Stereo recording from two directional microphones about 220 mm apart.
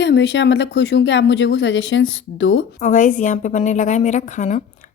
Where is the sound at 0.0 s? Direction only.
55° left (ahead or behind).